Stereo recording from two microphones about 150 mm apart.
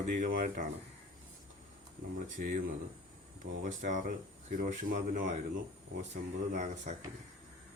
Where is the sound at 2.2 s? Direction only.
65° right (ahead or behind).